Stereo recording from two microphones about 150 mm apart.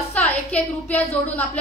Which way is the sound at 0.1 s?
10° left (ahead or behind).